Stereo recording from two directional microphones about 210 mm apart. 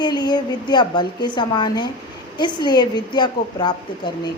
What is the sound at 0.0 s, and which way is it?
Speech, 20° left (ahead or behind).